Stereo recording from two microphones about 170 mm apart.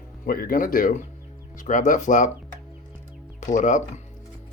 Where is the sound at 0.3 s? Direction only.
60° left (ahead or behind).